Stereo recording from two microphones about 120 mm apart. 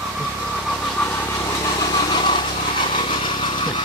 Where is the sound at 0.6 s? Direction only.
Centre (ahead or behind).